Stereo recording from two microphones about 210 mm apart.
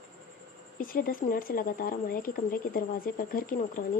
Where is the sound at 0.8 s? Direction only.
40° left (ahead or behind).